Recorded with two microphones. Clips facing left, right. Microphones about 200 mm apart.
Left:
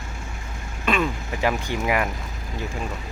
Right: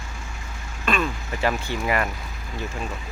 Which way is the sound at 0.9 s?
15° left (ahead or behind).